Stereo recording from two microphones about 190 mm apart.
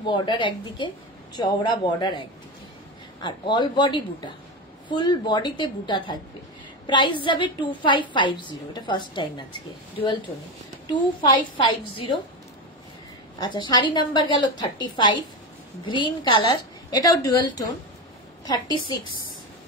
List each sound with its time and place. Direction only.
0.0 s a woman's voice: 25° left (ahead or behind)
11.5 s a woman's voice: 25° left (ahead or behind)
13.4 s a woman's voice: 25° left (ahead or behind)